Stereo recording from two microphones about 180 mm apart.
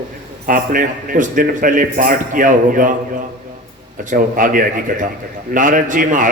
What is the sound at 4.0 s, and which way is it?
A man's voice, 45° right (ahead or behind).